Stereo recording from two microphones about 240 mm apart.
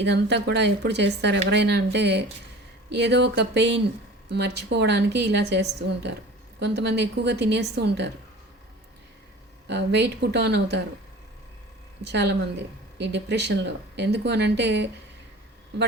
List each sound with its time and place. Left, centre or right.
0.0 s speech: right
9.6 s speech: right
12.0 s speech: right